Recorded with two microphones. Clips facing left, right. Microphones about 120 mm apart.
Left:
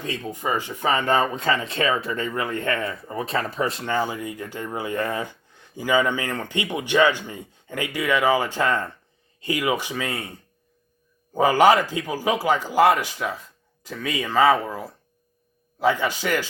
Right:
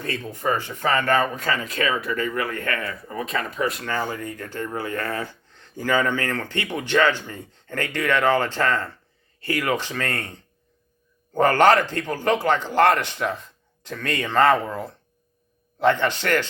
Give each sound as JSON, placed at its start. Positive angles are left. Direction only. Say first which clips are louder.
{"t": 0.0, "sound": "speech", "louder": "right 1 dB", "side_deg": 15}